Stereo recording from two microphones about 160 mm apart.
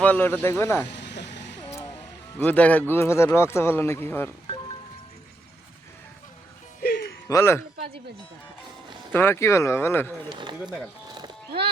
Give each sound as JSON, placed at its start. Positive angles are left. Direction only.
{"t": 0.0, "sound": "speech", "side_deg": 10}
{"t": 0.9, "sound": "vehicle", "side_deg": 90}
{"t": 2.4, "sound": "speech", "side_deg": 10}
{"t": 6.8, "sound": "music", "side_deg": 90}
{"t": 7.3, "sound": "speech", "side_deg": 15}
{"t": 9.1, "sound": "speech", "side_deg": 15}
{"t": 10.2, "sound": "a man's voice", "side_deg": -30}
{"t": 11.2, "sound": "music", "side_deg": -35}